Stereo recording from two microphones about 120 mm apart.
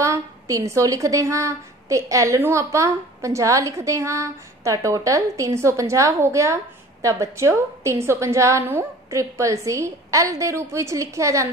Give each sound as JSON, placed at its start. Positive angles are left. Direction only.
{"t": 0.0, "sound": "a woman's voice", "side_deg": -25}